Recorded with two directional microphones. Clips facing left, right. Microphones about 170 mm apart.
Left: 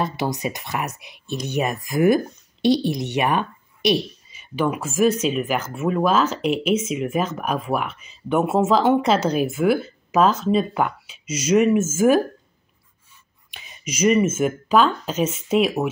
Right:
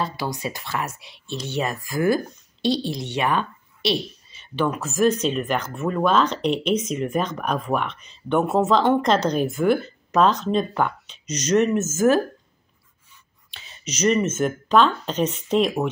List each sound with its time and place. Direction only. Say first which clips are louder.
0.0 s speech: left 3 dB; 20° left (ahead or behind)
13.5 s speech: left 2 dB; 15° left (ahead or behind)